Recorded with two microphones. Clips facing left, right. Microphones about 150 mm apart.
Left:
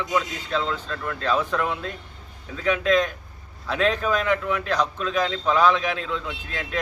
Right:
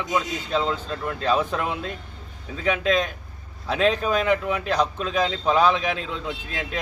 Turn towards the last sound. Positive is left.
turn(degrees=-20)  # may be behind; listen again after turning